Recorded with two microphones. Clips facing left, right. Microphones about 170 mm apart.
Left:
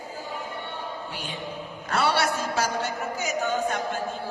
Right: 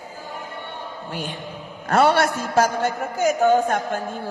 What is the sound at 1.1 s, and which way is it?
A man's voice, 50° right (ahead or behind).